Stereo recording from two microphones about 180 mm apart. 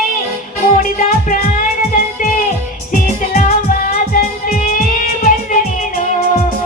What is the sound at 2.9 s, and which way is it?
Music, 45° left (ahead or behind).